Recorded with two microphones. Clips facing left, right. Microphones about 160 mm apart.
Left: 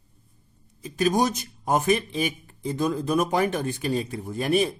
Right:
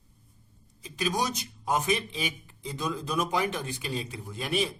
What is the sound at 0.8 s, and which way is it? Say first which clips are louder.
A man's voice: left 7 dB; 50° left (ahead or behind).